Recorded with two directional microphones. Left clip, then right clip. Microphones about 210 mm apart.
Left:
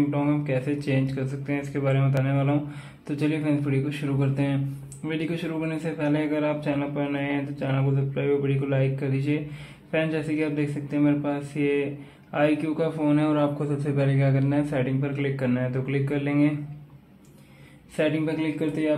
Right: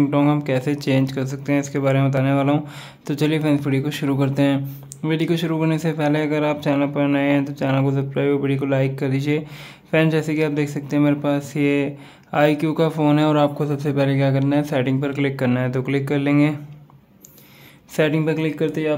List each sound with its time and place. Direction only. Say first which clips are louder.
0.1 s speech: right 7 dB; 40° right (ahead or behind)
17.9 s a man's voice: right 5 dB; 40° right (ahead or behind)